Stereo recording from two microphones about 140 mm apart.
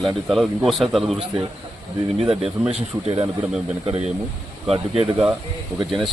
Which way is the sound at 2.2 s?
45° right (ahead or behind).